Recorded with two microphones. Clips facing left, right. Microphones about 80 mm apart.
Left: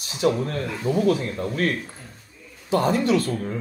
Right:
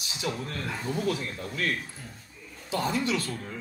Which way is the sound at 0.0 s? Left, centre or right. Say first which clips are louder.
Left 11 dB; left.